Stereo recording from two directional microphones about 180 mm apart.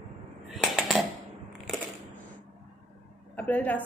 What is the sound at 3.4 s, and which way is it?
Speech, 10° left (ahead or behind).